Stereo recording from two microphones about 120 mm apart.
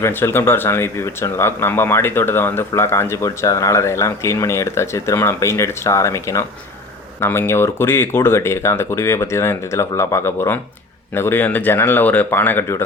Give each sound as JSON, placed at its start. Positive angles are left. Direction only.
{"t": 0.0, "sound": "speech", "side_deg": 20}